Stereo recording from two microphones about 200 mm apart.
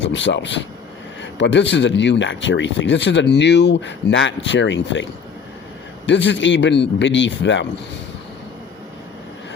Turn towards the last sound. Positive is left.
turn(degrees=65)  # may be behind; listen again after turning